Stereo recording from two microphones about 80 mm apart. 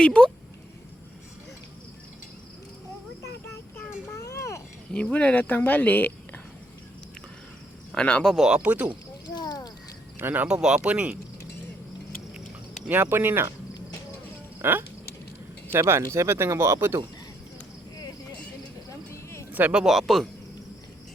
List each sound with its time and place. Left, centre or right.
0.0 s speech: centre
3.8 s child singing: left
4.2 s a sound: left
5.1 s speech: centre
7.9 s speech: centre
8.3 s speech: centre
9.2 s a sound: left
10.2 s speech: right
10.5 s speech: centre
12.9 s speech: right
14.6 s speech: right
18.9 s a sound: left
19.5 s speech: right
19.8 s speech: centre